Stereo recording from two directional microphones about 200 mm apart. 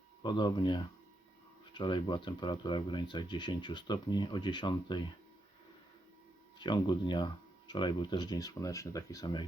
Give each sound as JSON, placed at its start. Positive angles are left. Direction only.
{"t": 0.2, "sound": "speech", "side_deg": 20}
{"t": 6.6, "sound": "speech", "side_deg": 20}